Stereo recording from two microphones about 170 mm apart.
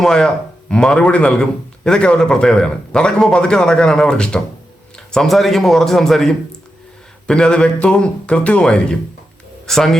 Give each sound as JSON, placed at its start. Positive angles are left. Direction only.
{"t": 0.0, "sound": "a man's voice", "side_deg": 5}